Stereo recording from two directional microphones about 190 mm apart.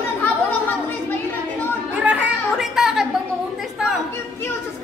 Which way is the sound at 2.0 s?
5° right (ahead or behind).